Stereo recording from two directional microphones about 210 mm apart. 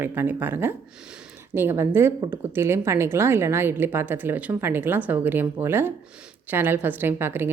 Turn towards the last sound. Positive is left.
turn(degrees=-10)  # may be behind; listen again after turning